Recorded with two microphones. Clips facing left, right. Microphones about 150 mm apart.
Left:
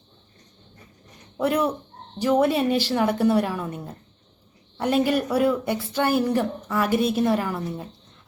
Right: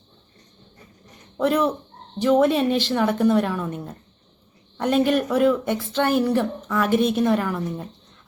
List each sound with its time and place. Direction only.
1.4 s a woman's voice: 15° left (ahead or behind)